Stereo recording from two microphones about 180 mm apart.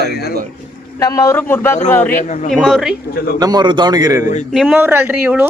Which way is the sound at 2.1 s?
45° left (ahead or behind).